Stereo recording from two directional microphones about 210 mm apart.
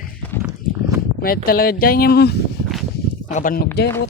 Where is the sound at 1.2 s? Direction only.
45° left (ahead or behind).